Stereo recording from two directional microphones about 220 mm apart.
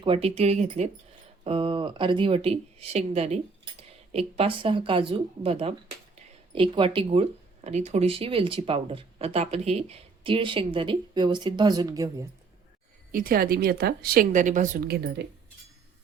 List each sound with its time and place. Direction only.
0.0 s speech: 25° right (ahead or behind)
13.1 s a woman's voice: 40° right (ahead or behind)